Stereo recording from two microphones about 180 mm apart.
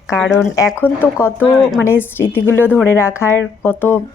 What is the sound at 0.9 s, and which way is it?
Speech, 10° left (ahead or behind).